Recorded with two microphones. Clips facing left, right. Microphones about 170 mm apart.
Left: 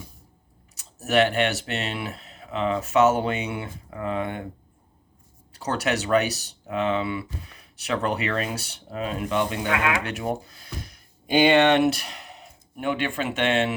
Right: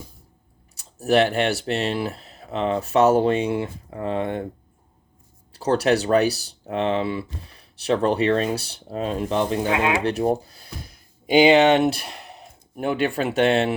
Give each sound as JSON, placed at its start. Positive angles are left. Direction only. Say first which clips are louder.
{"t": 0.8, "sound": "speech", "louder": "right 3 dB", "side_deg": -35}
{"t": 5.5, "sound": "speech", "louder": "right 7 dB", "side_deg": -30}